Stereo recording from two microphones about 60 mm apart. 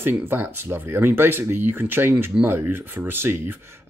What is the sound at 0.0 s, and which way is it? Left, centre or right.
Speech, right.